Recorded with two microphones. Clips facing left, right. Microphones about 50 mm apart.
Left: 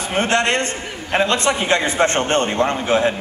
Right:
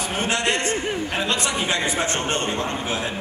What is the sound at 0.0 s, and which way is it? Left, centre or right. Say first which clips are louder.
Speech: left 5 dB; left.